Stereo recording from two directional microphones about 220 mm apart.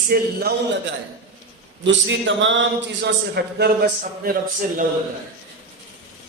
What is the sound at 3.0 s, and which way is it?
A man's voice, 50° right (ahead or behind).